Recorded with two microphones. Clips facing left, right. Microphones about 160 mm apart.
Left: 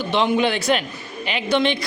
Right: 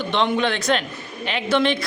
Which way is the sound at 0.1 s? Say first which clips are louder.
Left 2 dB; 5° left (ahead or behind).